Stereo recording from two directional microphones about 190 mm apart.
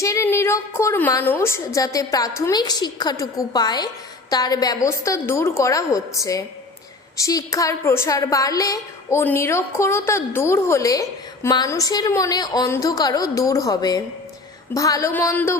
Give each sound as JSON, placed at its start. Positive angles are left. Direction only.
{"t": 0.0, "sound": "a woman's voice", "side_deg": 15}